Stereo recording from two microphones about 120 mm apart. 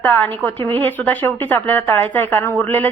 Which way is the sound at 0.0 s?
15° left (ahead or behind).